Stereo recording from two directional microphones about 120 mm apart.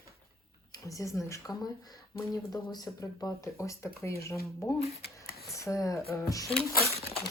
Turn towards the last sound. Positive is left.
turn(degrees=60)  # may be behind; listen again after turning